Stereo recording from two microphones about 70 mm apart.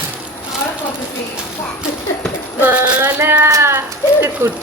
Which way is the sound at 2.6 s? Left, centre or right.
Right.